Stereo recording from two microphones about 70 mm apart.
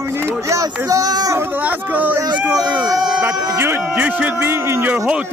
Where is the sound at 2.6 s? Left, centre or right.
Right.